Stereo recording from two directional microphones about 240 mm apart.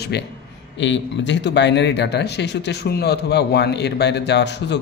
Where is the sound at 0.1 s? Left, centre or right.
Left.